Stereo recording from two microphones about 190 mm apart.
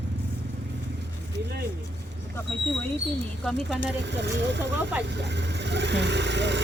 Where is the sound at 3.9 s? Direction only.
65° right (ahead or behind).